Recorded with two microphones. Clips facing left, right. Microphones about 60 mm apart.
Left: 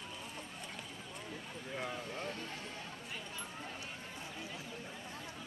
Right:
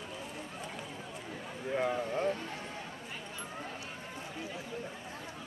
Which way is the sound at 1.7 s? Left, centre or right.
Right.